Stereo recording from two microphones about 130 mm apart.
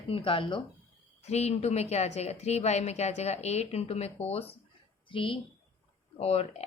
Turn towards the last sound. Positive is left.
turn(degrees=55)  # may be behind; listen again after turning